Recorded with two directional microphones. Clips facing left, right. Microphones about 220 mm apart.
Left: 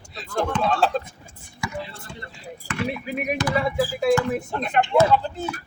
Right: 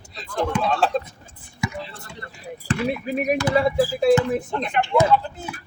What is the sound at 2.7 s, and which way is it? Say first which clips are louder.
Speech: right 4 dB; 30° right (ahead or behind).